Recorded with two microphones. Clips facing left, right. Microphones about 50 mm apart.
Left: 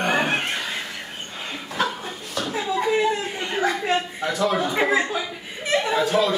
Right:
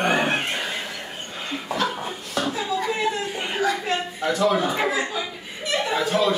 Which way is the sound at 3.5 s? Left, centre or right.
Left.